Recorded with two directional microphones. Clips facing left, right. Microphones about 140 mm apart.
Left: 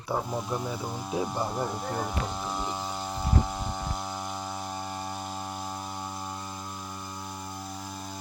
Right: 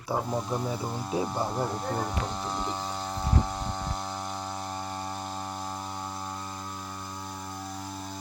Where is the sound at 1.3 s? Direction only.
Centre (ahead or behind).